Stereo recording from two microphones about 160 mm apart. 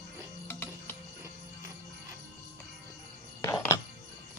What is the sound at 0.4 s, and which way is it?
Music, 15° left (ahead or behind).